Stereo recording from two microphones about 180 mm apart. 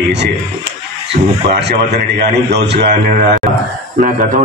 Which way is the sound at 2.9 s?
50° right (ahead or behind).